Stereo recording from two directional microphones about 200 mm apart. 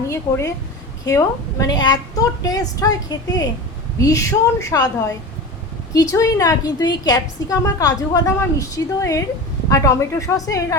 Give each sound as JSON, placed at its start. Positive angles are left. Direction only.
{"t": 0.1, "sound": "a woman's voice", "side_deg": 15}